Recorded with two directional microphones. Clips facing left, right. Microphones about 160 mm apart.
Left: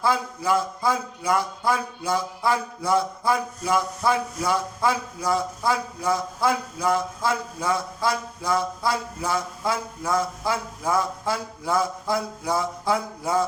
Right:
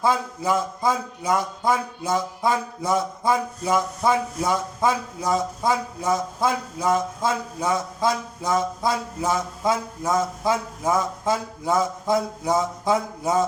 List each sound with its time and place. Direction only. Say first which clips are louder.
0.0 s speech: right 1 dB; 20° right (ahead or behind)